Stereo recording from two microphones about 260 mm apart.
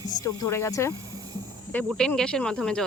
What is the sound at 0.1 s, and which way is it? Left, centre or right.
Speech, centre.